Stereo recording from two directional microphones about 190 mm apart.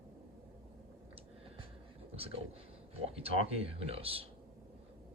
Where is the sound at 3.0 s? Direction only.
30° right (ahead or behind).